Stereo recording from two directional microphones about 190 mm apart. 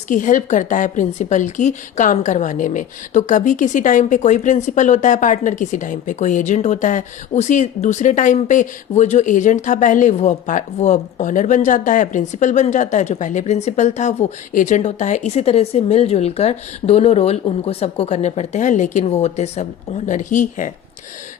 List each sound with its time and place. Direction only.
0.1 s a woman's voice: 45° left (ahead or behind)